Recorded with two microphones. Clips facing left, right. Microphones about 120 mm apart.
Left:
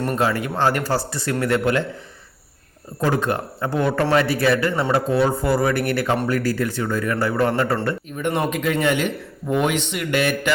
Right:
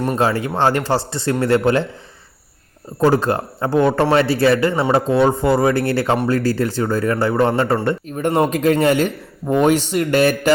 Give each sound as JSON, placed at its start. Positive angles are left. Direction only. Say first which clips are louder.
{"t": 0.2, "sound": "a man's voice", "louder": "right 3 dB", "side_deg": -30}
{"t": 3.0, "sound": "a man's voice", "louder": "right 5 dB", "side_deg": -30}
{"t": 8.0, "sound": "speech", "louder": "right 5 dB", "side_deg": -40}